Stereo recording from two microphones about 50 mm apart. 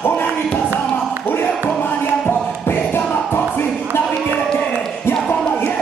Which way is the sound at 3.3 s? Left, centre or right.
Left.